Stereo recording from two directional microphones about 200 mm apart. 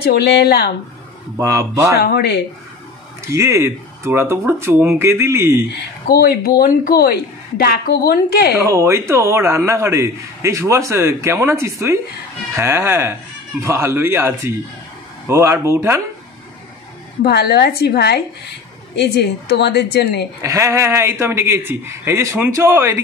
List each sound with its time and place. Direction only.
0.0 s a woman's voice: 55° left (ahead or behind)
1.4 s a man's voice: 15° right (ahead or behind)
2.0 s a woman's voice: 55° left (ahead or behind)
3.2 s a man's voice: 15° right (ahead or behind)
6.0 s a woman's voice: 50° left (ahead or behind)
8.6 s a man's voice: 15° right (ahead or behind)
17.2 s a woman's voice: 55° left (ahead or behind)
20.4 s a man's voice: 15° right (ahead or behind)